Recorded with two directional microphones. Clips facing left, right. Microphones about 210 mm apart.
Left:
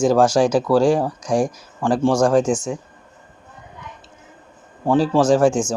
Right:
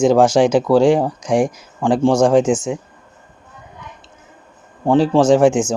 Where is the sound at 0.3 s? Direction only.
25° right (ahead or behind).